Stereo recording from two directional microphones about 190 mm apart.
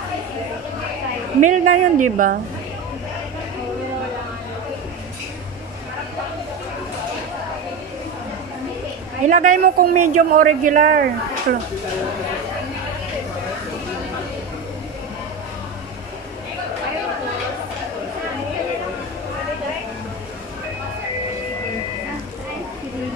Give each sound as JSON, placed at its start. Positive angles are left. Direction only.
{"t": 1.4, "sound": "speech", "side_deg": -40}
{"t": 9.2, "sound": "speech", "side_deg": -40}